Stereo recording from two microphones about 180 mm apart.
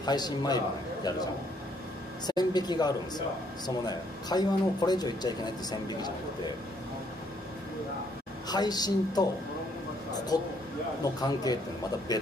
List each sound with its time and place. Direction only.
0.0 s speech: 20° left (ahead or behind)
2.2 s speech: 20° left (ahead or behind)
8.5 s speech: 20° left (ahead or behind)
10.3 s speech: 20° left (ahead or behind)